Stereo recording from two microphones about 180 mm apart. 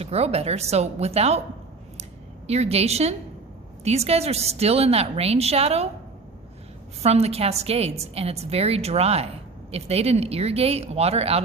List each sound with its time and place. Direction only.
0.0 s a woman's voice: 35° right (ahead or behind)
2.5 s a woman's voice: 35° right (ahead or behind)
7.0 s a woman's voice: 35° right (ahead or behind)